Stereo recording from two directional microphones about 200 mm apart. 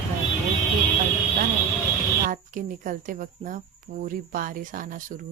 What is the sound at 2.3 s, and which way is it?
Speech, 40° right (ahead or behind).